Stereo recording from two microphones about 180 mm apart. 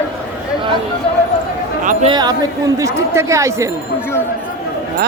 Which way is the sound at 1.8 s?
45° right (ahead or behind).